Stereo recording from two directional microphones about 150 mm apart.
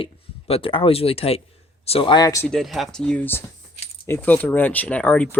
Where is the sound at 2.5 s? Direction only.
Centre (ahead or behind).